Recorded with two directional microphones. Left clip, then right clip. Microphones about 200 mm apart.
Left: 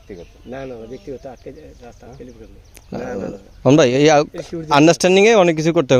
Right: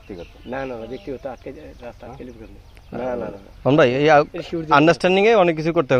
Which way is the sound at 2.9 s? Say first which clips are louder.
Even; 60° left (ahead or behind).